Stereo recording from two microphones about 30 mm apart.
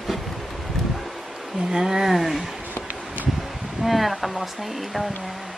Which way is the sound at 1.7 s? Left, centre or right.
Centre.